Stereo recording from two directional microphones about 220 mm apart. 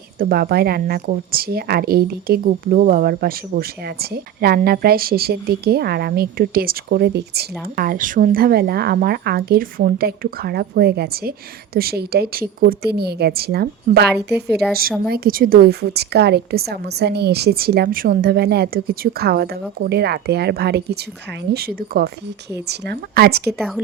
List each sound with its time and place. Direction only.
0.2 s a woman's voice: 45° right (ahead or behind)
23.6 s a woman's voice: centre (ahead or behind)